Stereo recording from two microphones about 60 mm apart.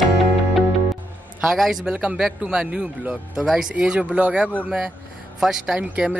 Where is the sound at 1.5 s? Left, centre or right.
Centre.